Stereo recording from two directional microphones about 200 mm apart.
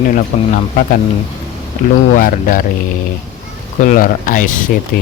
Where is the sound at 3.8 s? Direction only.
40° left (ahead or behind).